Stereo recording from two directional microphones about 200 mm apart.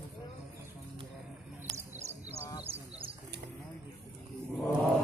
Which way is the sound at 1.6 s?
10° right (ahead or behind).